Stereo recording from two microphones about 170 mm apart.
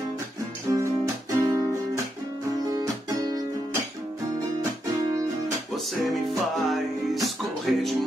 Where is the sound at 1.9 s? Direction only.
20° right (ahead or behind).